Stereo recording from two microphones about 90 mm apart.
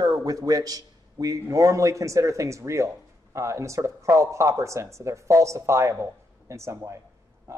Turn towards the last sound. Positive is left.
turn(degrees=-30)  # may be behind; listen again after turning